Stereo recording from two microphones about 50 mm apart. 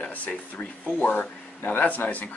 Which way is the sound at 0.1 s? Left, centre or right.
Left.